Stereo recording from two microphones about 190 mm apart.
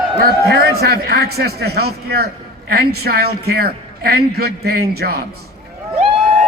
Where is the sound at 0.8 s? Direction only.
55° right (ahead or behind).